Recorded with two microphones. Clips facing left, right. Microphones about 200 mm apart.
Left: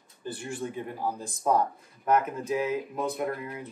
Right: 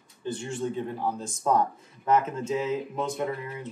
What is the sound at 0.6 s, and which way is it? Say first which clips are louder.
Speech: right 3 dB; 10° left (ahead or behind).